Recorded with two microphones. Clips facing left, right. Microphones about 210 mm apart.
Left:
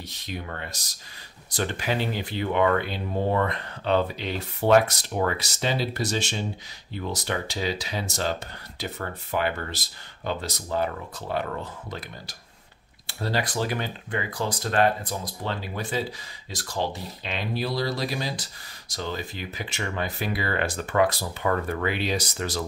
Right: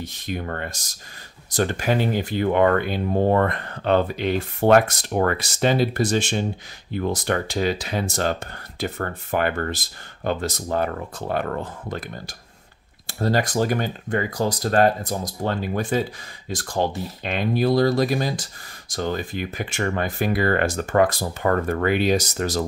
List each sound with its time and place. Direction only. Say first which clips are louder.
0.0 s speech: right 6 dB; 50° right (ahead or behind)